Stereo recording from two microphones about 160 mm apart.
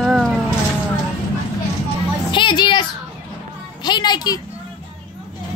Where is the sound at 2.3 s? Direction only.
30° left (ahead or behind).